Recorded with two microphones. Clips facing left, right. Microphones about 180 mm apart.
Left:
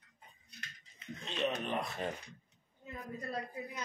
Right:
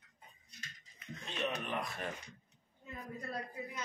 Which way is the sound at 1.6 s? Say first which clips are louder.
Left 3 dB; 25° left (ahead or behind).